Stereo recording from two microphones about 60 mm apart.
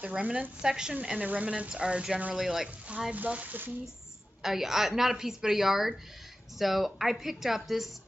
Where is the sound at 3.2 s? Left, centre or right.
Right.